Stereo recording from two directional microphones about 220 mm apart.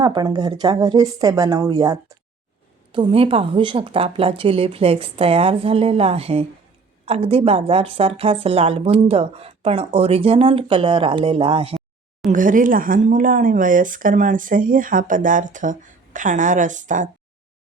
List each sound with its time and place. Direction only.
0.0 s a woman's voice: 20° right (ahead or behind)
12.3 s speech: 35° right (ahead or behind)